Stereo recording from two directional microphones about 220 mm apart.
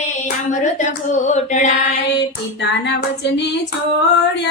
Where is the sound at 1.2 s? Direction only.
35° left (ahead or behind).